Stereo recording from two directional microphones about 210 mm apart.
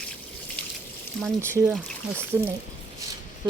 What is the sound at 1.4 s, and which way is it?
Speech, 15° right (ahead or behind).